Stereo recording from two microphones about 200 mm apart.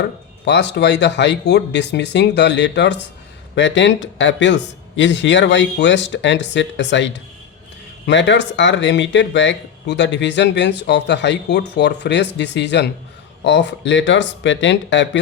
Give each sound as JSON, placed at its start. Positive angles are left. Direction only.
{"t": 0.4, "sound": "speech", "side_deg": 60}